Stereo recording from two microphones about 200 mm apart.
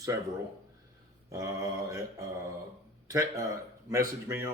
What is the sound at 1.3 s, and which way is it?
Speech, 15° right (ahead or behind).